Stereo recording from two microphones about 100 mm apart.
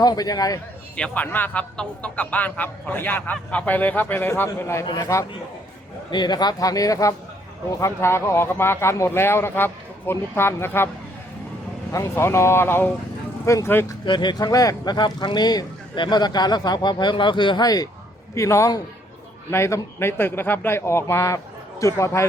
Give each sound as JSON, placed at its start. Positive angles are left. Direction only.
{"t": 0.0, "sound": "speech", "side_deg": 40}
{"t": 0.9, "sound": "speech", "side_deg": 15}
{"t": 6.1, "sound": "speech", "side_deg": 45}
{"t": 11.9, "sound": "speech", "side_deg": 30}
{"t": 14.0, "sound": "speech", "side_deg": 50}